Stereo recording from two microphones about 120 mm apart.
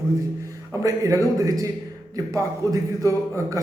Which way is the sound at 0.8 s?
25° right (ahead or behind).